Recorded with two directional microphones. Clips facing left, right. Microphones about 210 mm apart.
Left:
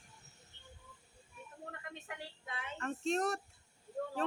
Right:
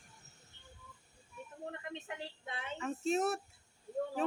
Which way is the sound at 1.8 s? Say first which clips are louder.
Right 4 dB; 25° right (ahead or behind).